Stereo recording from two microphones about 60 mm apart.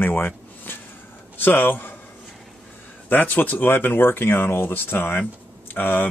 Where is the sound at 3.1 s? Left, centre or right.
Left.